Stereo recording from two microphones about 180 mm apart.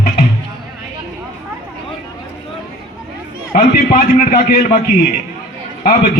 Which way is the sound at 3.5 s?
50° left (ahead or behind).